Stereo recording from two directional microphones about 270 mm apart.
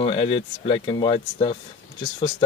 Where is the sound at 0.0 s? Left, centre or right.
Centre.